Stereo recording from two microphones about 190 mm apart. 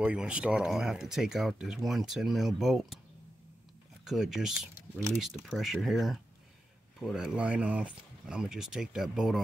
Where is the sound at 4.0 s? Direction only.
Centre (ahead or behind).